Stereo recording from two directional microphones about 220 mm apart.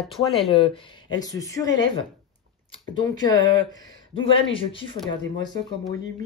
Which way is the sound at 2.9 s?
15° left (ahead or behind).